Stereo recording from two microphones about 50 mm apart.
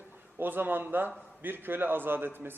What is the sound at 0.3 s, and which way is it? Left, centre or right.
A man's voice, right.